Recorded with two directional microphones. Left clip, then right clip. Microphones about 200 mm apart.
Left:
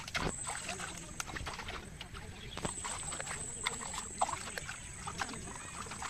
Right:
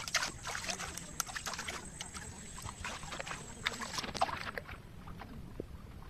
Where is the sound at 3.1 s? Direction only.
5° right (ahead or behind).